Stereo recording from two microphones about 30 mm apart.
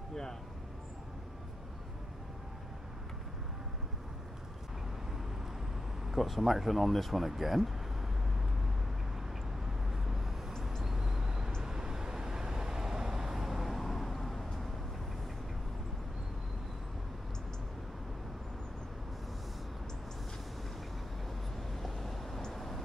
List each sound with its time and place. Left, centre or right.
6.1 s speech: centre
9.8 s vehicle: centre
13.5 s vehicle: centre
21.7 s vehicle: centre